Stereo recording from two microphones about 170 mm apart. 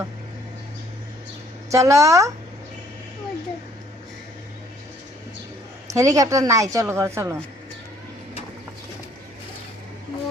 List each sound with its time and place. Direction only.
1.7 s speech: 20° right (ahead or behind)
5.9 s a woman's voice: 20° right (ahead or behind)